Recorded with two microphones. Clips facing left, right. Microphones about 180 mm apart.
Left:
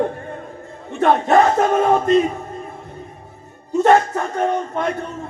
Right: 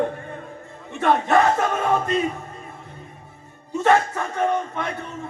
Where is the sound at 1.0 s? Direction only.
45° left (ahead or behind).